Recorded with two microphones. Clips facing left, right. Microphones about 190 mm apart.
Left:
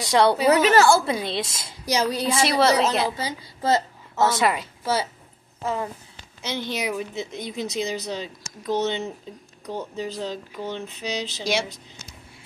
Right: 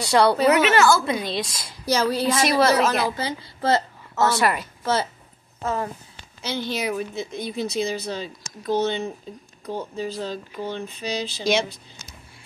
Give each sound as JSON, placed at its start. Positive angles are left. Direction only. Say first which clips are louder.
{"t": 0.0, "sound": "a woman's voice", "louder": "right 1 dB", "side_deg": 20}
{"t": 0.5, "sound": "a woman's voice", "louder": "left 1 dB", "side_deg": 35}
{"t": 1.9, "sound": "a woman's voice", "louder": "right 2 dB", "side_deg": 15}
{"t": 2.4, "sound": "a woman's voice", "louder": "even", "side_deg": 25}
{"t": 6.4, "sound": "a woman's voice", "louder": "right 1 dB", "side_deg": 20}